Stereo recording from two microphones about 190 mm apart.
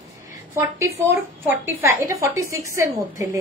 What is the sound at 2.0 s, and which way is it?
A woman's voice, 15° right (ahead or behind).